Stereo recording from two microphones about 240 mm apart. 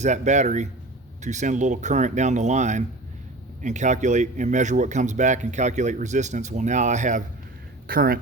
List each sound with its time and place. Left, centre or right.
0.0 s speech: right